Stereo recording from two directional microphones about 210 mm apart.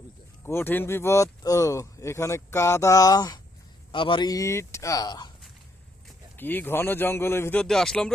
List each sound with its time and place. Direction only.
0.4 s speech: 10° left (ahead or behind)
6.3 s speech: 10° left (ahead or behind)